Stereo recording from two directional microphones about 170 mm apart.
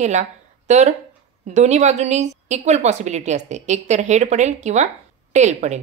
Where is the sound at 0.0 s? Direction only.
45° right (ahead or behind).